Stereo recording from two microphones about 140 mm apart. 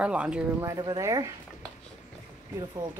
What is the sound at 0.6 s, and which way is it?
Speech, 25° right (ahead or behind).